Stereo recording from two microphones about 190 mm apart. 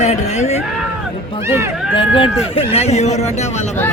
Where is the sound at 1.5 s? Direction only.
15° right (ahead or behind).